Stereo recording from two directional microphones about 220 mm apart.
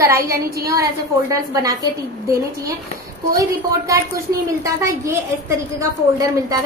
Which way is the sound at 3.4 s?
15° right (ahead or behind).